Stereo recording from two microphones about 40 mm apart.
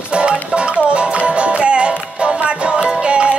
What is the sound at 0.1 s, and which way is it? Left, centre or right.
Music, right.